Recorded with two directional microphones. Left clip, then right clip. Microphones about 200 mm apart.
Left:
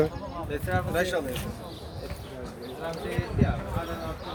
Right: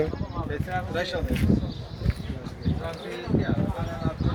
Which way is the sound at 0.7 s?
55° left (ahead or behind).